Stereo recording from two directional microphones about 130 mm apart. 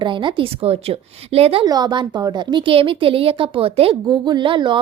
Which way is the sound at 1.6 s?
30° right (ahead or behind).